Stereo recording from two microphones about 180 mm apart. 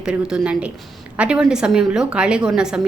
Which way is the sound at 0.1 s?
5° right (ahead or behind).